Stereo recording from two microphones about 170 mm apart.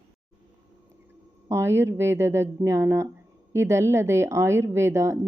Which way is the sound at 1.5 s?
15° right (ahead or behind).